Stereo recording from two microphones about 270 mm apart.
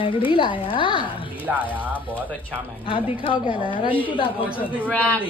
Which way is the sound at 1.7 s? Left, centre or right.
Centre.